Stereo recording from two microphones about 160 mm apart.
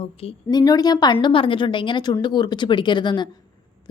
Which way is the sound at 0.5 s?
25° left (ahead or behind).